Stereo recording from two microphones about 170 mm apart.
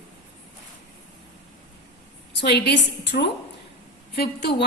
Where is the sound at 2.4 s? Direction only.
80° left.